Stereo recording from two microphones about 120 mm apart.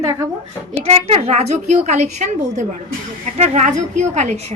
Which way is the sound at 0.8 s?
55° right (ahead or behind).